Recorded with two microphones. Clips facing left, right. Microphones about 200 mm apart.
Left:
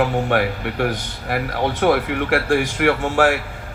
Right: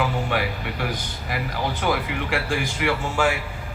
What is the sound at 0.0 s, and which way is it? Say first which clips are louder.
A man's voice: left 6 dB; 65° left (ahead or behind).